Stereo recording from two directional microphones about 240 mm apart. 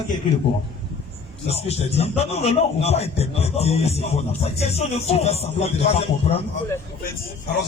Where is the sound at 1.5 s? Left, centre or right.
Left.